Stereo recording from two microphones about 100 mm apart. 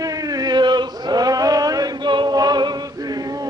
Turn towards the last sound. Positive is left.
turn(degrees=-45)  # may be behind; listen again after turning